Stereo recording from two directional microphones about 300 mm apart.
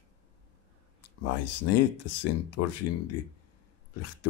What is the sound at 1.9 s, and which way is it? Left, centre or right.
Speech, left.